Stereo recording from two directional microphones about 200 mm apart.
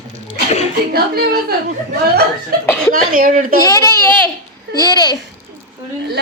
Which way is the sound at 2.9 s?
45° right (ahead or behind).